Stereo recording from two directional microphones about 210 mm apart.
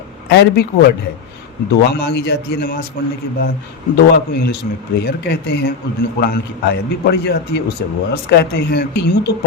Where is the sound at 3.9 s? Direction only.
50° left (ahead or behind).